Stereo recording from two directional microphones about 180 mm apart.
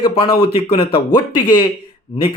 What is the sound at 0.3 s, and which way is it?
Speech, 30° left (ahead or behind).